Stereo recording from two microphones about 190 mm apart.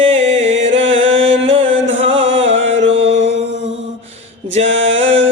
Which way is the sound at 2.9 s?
30° right (ahead or behind).